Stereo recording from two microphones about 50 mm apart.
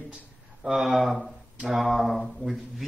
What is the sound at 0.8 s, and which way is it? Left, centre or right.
Speech, centre.